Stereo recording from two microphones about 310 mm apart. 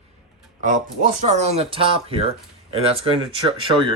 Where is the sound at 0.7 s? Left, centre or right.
Right.